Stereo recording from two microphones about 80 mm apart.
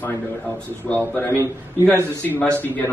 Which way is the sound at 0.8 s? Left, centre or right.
Left.